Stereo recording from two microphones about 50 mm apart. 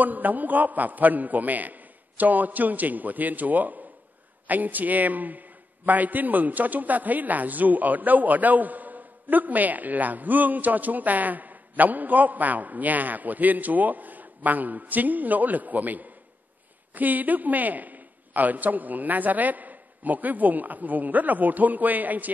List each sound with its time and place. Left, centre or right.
0.0 s a man's voice: right